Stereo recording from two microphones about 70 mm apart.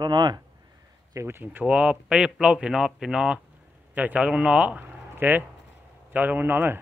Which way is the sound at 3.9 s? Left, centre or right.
Right.